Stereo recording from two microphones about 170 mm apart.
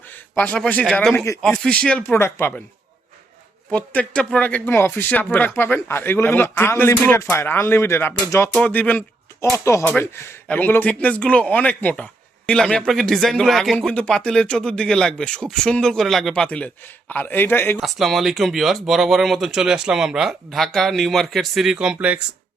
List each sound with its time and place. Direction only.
0.1 s a man's voice: 10° left (ahead or behind)
1.4 s a man's voice: 5° left (ahead or behind)
3.7 s a man's voice: 5° left (ahead or behind)
17.7 s speech: centre (ahead or behind)